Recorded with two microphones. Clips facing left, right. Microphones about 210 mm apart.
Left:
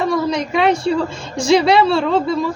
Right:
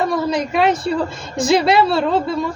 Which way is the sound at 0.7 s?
30° left (ahead or behind).